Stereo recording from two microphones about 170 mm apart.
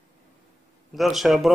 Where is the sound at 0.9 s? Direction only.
Centre (ahead or behind).